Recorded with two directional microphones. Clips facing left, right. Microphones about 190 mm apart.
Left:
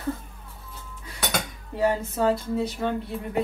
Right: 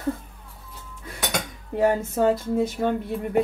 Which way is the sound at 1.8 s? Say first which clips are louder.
Right 3 dB; 50° right (ahead or behind).